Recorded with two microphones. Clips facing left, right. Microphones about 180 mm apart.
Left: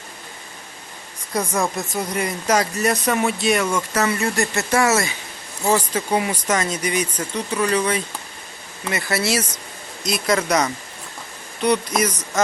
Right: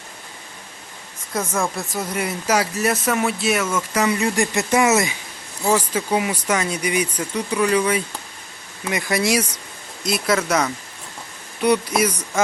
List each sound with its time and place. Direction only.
1.3 s speech: centre (ahead or behind)
3.9 s speech: 15° right (ahead or behind)
5.6 s speech: 5° right (ahead or behind)
10.1 s speech: 5° right (ahead or behind)